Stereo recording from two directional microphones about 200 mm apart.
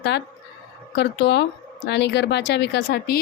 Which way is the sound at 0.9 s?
55° left (ahead or behind).